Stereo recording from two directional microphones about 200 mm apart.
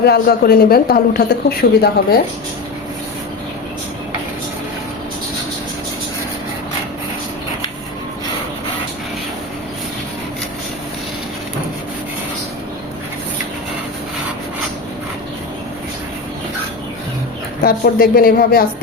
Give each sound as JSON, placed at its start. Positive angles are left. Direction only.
{"t": 0.0, "sound": "speech", "side_deg": 50}
{"t": 17.6, "sound": "speech", "side_deg": 50}